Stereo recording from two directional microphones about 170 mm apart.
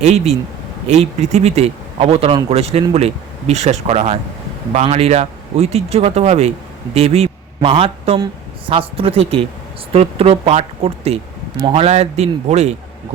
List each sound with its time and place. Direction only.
0.0 s a man's voice: 40° right (ahead or behind)